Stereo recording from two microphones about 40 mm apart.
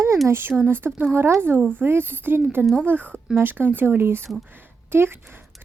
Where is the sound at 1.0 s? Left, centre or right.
Right.